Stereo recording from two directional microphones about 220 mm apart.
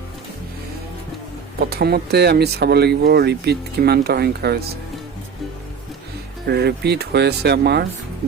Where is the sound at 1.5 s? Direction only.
45° right (ahead or behind).